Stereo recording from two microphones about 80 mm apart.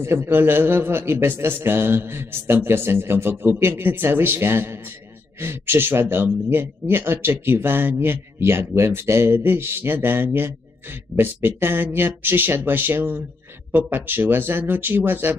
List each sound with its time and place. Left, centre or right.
0.0 s a man's voice: right